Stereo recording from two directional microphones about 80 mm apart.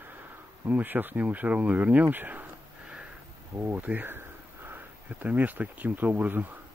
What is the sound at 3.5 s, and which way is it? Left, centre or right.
Speech, right.